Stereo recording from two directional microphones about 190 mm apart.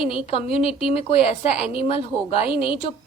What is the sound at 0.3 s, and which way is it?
A woman's voice, 30° left (ahead or behind).